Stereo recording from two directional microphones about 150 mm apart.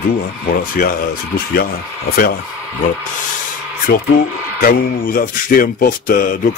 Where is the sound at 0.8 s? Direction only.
80° left.